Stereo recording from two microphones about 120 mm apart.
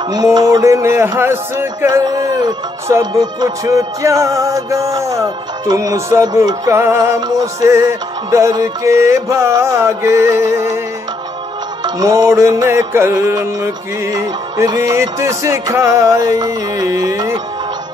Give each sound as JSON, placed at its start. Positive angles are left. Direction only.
{"t": 0.1, "sound": "speech", "side_deg": -35}
{"t": 11.8, "sound": "speech", "side_deg": -30}